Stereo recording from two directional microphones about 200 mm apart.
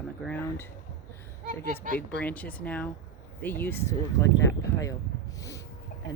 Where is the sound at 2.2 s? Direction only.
5° left (ahead or behind).